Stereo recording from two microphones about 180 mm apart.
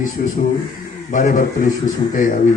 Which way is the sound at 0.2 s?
55° left (ahead or behind).